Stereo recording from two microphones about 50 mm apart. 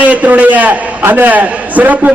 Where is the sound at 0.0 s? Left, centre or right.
Right.